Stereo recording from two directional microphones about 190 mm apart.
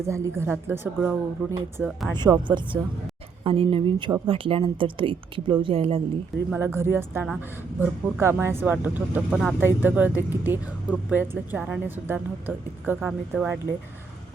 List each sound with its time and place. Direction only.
0.0 s speech: 15° right (ahead or behind)
2.1 s speech: 20° right (ahead or behind)
3.4 s speech: 30° right (ahead or behind)
6.5 s speech: 15° right (ahead or behind)